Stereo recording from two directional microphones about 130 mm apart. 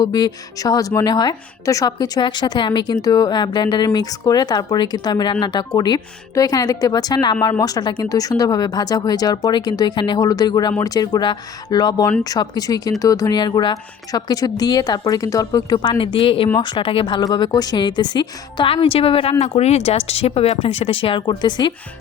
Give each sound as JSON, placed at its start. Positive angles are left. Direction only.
{"t": 0.0, "sound": "speech", "side_deg": 30}